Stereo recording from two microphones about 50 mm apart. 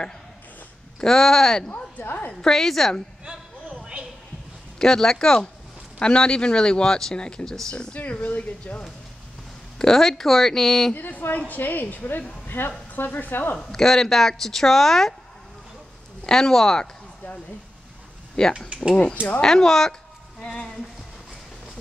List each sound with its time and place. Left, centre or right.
1.0 s speech: centre
2.0 s a woman's voice: left
2.4 s speech: centre
3.8 s a sound: centre
4.7 s speech: centre; by 8.8 s left
9.8 s speech: centre
11.0 s a woman's voice: left
12.4 s speech: left
13.6 s speech: centre
16.3 s speech: centre
18.3 s speech: centre